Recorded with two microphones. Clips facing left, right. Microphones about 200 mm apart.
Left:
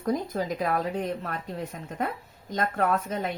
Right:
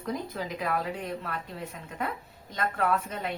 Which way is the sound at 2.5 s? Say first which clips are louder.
Left 2 dB; 45° left (ahead or behind).